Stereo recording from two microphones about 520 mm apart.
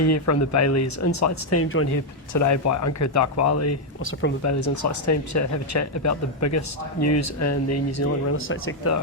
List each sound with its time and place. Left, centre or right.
0.0 s speech: left